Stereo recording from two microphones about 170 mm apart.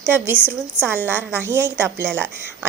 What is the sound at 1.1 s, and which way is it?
Speech, 10° right (ahead or behind).